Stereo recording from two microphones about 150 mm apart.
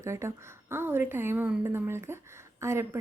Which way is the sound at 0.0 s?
20° right (ahead or behind).